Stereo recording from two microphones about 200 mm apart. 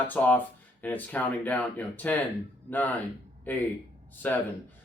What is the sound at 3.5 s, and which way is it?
Speech, 10° left (ahead or behind).